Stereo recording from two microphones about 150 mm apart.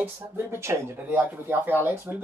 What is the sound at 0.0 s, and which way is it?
Speech, 15° right (ahead or behind).